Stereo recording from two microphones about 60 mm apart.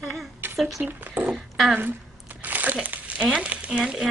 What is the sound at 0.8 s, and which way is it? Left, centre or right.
Speech, right.